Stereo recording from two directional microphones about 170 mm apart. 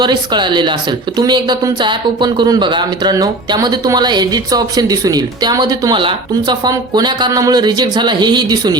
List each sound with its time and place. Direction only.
0.0 s speech: 25° right (ahead or behind)